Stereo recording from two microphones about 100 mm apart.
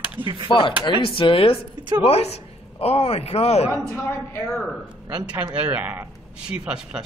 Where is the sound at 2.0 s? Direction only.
90° left.